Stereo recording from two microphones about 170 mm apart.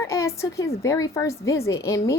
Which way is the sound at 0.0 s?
15° left (ahead or behind).